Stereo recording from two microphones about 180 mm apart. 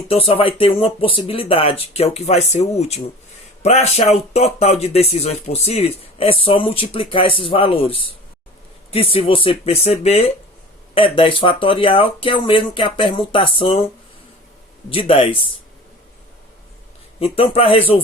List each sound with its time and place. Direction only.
0.1 s speech: 30° left (ahead or behind)
14.8 s speech: 30° left (ahead or behind)
17.2 s speech: 30° left (ahead or behind)